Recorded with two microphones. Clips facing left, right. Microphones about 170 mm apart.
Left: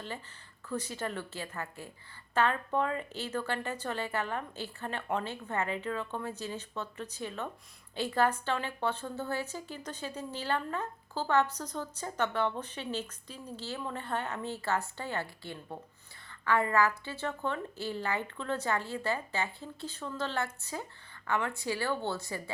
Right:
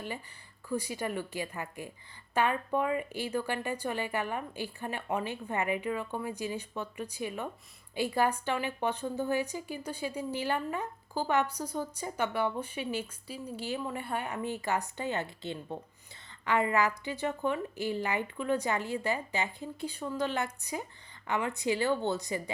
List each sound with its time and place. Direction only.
0.7 s a woman's voice: 10° right (ahead or behind)